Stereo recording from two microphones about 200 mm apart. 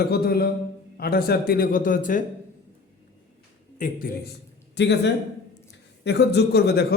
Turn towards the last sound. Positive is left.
turn(degrees=55)  # may be behind; listen again after turning